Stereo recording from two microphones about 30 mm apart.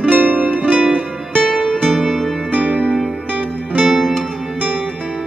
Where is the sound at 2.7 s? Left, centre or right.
Left.